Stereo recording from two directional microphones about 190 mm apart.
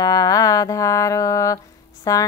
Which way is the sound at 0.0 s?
20° left (ahead or behind).